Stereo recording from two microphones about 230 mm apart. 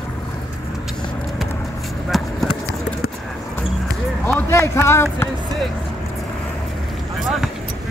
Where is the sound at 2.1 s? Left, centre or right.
Centre.